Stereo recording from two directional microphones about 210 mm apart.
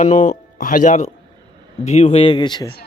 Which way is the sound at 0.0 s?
35° left (ahead or behind).